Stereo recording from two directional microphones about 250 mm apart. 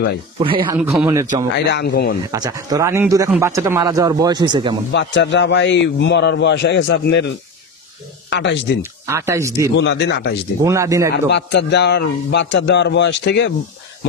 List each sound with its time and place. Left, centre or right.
0.4 s speech: centre
0.7 s speech: centre
1.7 s speech: left
2.3 s speech: centre
4.9 s a man's voice: left
9.0 s speech: centre
9.8 s a man's voice: left
10.6 s speech: centre
11.2 s a man's voice: left